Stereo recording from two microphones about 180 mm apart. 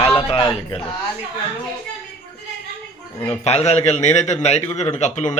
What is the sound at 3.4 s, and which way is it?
A man's voice, 35° left (ahead or behind).